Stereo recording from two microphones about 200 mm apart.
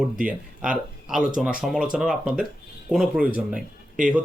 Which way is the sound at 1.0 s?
5° right (ahead or behind).